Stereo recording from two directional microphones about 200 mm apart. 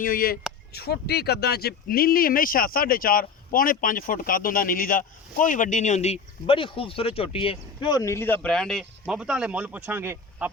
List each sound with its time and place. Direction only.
0.0 s speech: 45° left (ahead or behind); by 10.5 s 10° right (ahead or behind)